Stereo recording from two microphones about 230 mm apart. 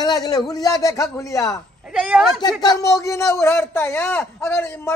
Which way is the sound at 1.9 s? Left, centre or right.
Centre.